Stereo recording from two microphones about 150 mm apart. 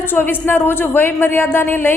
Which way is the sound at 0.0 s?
15° left (ahead or behind).